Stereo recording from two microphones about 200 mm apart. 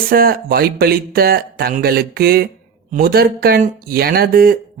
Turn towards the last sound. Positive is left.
turn(degrees=-50)  # may be behind; listen again after turning